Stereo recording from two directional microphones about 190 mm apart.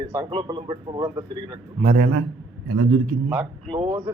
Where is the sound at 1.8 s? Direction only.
45° right (ahead or behind).